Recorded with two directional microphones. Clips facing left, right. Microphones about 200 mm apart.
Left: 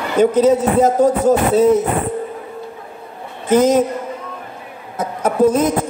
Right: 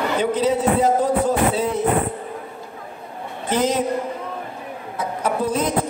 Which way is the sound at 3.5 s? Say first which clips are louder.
Left 8 dB; 45° left (ahead or behind).